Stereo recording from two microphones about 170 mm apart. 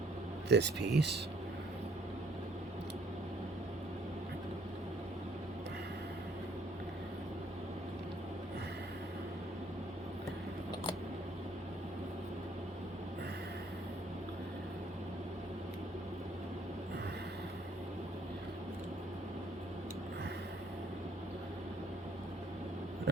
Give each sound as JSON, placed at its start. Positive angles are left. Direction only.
{"t": 0.4, "sound": "speech", "side_deg": -85}